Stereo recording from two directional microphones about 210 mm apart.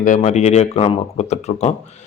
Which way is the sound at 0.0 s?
35° left (ahead or behind).